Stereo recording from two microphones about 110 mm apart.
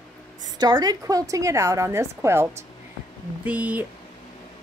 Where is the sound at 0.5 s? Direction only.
40° right (ahead or behind).